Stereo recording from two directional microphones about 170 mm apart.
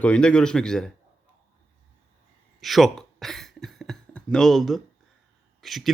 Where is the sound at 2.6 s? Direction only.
Centre (ahead or behind).